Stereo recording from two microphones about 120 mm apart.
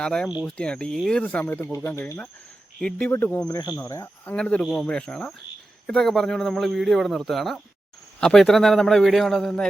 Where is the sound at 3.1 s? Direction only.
20° left (ahead or behind).